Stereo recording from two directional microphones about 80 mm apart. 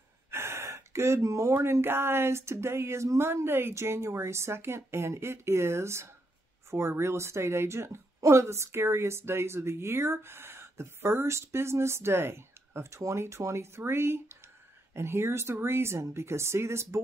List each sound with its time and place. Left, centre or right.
0.3 s a woman's voice: right